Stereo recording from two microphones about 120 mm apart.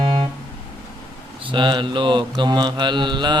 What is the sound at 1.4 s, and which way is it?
Mantra, 40° right (ahead or behind).